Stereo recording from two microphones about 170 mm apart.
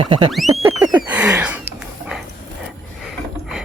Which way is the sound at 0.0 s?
30° right (ahead or behind).